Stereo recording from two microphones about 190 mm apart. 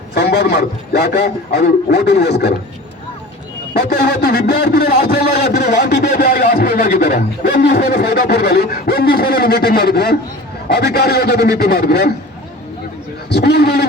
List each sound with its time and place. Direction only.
0.1 s a man's voice: 60° left (ahead or behind)
3.8 s a man's voice: 55° left (ahead or behind)
13.3 s a man's voice: 60° left (ahead or behind)